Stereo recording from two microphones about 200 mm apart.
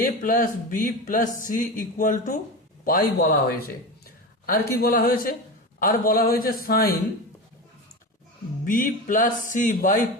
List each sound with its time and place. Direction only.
0.0 s speech: 45° left (ahead or behind)
8.6 s speech: 40° left (ahead or behind)